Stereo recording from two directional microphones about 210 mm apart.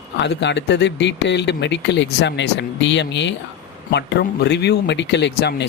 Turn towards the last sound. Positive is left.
turn(degrees=55)  # may be behind; listen again after turning